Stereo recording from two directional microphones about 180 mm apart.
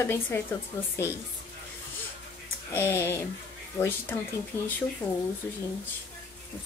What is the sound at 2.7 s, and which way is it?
Speech, 15° left (ahead or behind).